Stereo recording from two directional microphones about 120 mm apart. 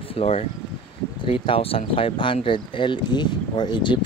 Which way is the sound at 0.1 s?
55° left (ahead or behind).